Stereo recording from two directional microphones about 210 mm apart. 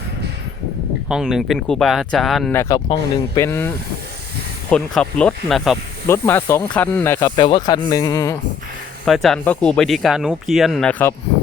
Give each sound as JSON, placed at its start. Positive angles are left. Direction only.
{"t": 1.0, "sound": "speech", "side_deg": -5}
{"t": 4.7, "sound": "speech", "side_deg": 5}
{"t": 6.1, "sound": "speech", "side_deg": 10}
{"t": 7.3, "sound": "speech", "side_deg": 20}
{"t": 9.0, "sound": "speech", "side_deg": 0}